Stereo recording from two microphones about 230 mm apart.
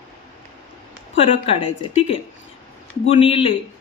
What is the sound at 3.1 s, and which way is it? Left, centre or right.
Speech, left.